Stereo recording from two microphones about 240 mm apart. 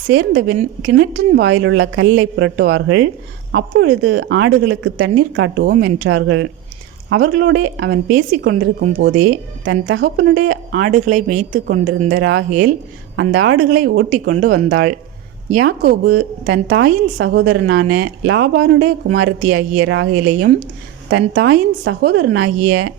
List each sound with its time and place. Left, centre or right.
0.1 s speech: right
9.6 s a woman's voice: right
10.7 s speech: right
11.9 s a woman's voice: right
13.8 s speech: right
19.4 s a woman's voice: right